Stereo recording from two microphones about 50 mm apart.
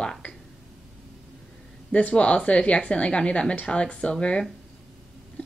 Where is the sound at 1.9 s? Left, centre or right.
Left.